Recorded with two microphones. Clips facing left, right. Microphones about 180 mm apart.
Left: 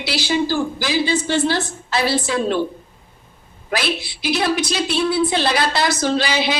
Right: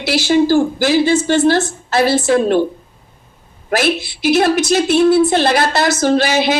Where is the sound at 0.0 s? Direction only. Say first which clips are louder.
Right 7 dB; 50° right (ahead or behind).